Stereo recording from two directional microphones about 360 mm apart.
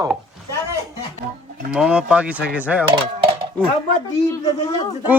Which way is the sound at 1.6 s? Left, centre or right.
Centre.